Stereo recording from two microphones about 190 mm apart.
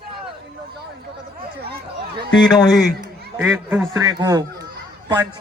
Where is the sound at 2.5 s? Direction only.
20° left (ahead or behind).